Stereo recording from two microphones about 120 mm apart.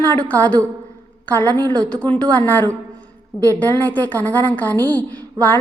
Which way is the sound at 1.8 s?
10° left (ahead or behind).